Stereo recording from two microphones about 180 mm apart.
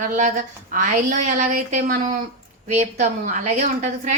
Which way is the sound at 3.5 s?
40° right (ahead or behind).